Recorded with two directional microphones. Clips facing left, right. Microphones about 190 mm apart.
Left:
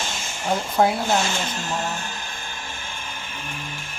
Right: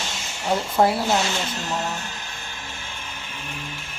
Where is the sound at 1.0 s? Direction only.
50° left (ahead or behind).